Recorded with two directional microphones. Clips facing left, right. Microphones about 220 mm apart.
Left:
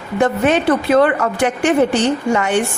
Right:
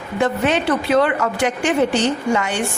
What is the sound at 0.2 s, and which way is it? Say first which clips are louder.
A woman's voice: left 3 dB; 50° left (ahead or behind).